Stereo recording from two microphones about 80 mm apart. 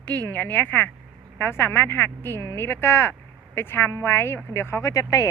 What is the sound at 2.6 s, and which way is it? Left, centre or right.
Speech, left.